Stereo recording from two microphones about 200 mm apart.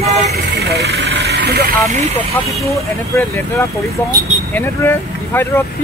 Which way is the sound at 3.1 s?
15° left (ahead or behind).